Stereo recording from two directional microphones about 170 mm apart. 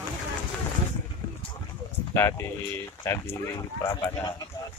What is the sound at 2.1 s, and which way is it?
Speech, 15° left (ahead or behind).